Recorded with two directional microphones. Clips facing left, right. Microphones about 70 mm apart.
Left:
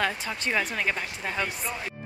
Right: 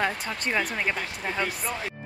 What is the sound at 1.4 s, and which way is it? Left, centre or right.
Speech, right.